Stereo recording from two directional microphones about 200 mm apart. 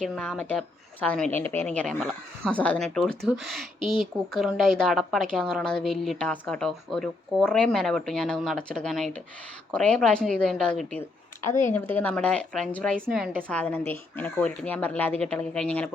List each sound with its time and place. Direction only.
0.0 s speech: 5° left (ahead or behind)